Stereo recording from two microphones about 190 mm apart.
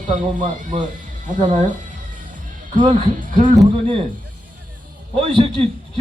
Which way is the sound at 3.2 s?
45° right (ahead or behind).